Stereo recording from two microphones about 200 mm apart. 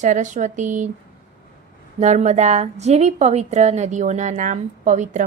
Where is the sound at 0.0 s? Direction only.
40° right (ahead or behind).